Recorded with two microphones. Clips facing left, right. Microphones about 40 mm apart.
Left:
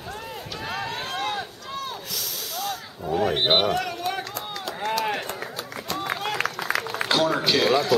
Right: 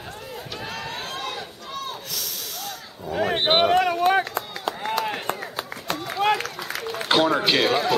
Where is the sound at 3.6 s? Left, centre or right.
Right.